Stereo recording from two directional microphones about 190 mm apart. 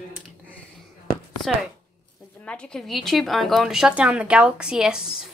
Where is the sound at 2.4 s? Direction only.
5° left (ahead or behind).